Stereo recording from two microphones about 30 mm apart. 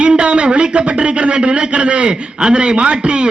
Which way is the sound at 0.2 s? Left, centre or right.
Right.